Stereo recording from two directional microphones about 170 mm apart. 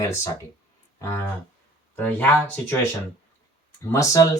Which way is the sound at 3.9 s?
20° left (ahead or behind).